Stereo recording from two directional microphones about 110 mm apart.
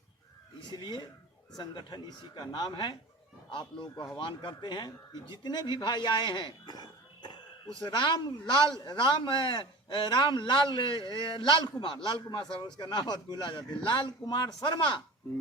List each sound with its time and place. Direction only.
0.7 s a man's voice: 45° left (ahead or behind)